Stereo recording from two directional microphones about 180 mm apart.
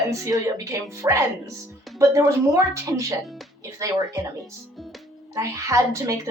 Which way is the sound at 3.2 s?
Centre (ahead or behind).